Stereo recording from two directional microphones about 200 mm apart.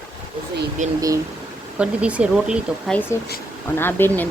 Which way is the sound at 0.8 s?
40° right (ahead or behind).